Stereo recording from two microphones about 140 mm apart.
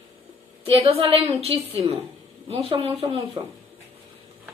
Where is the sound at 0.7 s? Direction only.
45° right (ahead or behind).